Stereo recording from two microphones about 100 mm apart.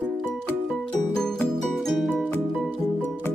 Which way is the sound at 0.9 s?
5° left (ahead or behind).